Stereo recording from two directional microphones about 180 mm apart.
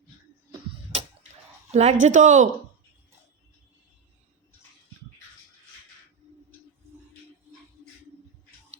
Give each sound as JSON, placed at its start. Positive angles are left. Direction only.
{"t": 1.7, "sound": "speech", "side_deg": -40}